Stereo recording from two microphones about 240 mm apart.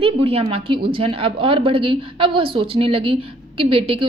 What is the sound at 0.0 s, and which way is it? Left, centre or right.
A woman's voice, right.